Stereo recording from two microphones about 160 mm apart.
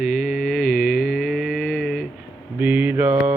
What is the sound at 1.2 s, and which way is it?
Mantra, centre (ahead or behind).